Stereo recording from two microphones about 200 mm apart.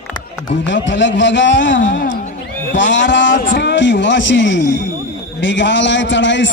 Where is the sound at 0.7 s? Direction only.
65° left (ahead or behind).